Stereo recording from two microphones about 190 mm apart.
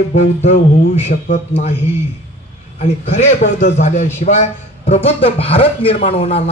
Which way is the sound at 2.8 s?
35° left (ahead or behind).